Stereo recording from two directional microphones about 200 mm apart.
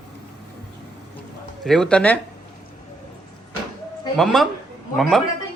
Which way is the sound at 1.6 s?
Centre (ahead or behind).